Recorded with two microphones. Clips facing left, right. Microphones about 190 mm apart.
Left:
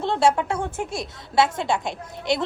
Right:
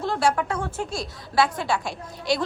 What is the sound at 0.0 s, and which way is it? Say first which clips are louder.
A woman's voice: left 3 dB; 25° left (ahead or behind).